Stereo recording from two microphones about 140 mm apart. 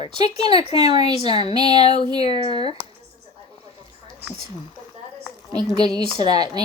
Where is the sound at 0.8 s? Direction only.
30° right (ahead or behind).